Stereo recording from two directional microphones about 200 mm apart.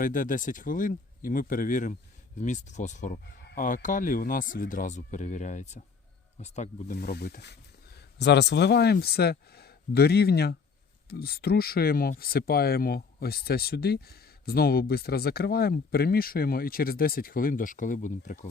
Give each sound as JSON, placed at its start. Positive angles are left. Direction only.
{"t": 0.0, "sound": "speech", "side_deg": 40}
{"t": 3.4, "sound": "chicken", "side_deg": 45}
{"t": 3.8, "sound": "speech", "side_deg": 40}